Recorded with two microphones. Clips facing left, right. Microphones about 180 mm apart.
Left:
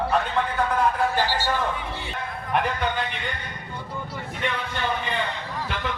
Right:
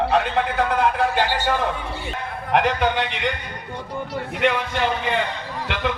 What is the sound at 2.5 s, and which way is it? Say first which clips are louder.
A man's voice: right 5 dB; 75° right (ahead or behind).